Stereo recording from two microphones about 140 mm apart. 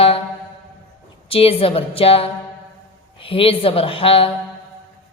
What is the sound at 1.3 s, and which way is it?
A woman's voice, 45° left (ahead or behind).